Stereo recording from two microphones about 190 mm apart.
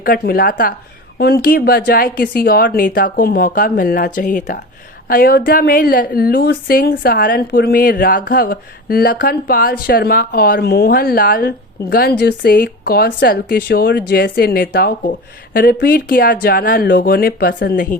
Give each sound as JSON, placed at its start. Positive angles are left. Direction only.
{"t": 0.0, "sound": "a woman's voice", "side_deg": 50}